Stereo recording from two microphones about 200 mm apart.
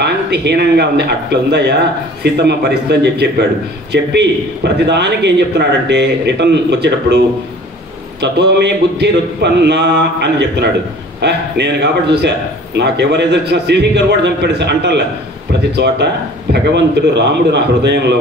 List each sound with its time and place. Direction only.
0.0 s a man's voice: 55° right (ahead or behind)
8.2 s a man's voice: 55° right (ahead or behind)